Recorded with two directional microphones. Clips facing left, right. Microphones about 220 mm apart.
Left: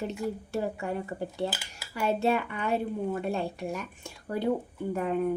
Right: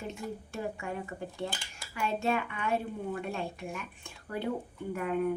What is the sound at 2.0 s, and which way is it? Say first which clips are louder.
A woman's voice: left 4 dB; 35° left (ahead or behind).